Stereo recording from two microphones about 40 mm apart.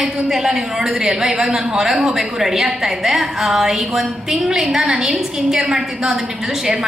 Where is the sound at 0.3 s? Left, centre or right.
Centre.